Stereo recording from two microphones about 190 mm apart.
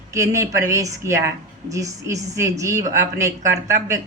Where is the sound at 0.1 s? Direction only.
15° right (ahead or behind).